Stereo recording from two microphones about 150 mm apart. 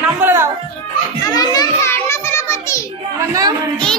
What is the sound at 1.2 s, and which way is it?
Children playing, 25° left (ahead or behind).